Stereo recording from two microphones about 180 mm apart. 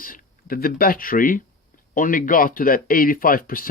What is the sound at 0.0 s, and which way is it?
Speech, 50° left (ahead or behind).